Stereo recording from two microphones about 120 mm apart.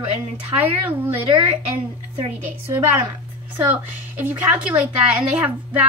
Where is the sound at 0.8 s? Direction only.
15° right (ahead or behind).